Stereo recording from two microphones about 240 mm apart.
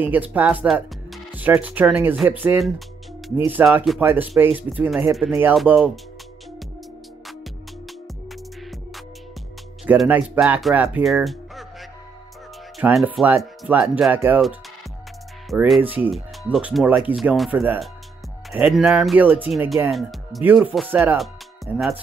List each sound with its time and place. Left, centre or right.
0.0 s speech: centre
9.8 s speech: centre
12.7 s speech: centre
15.5 s speech: centre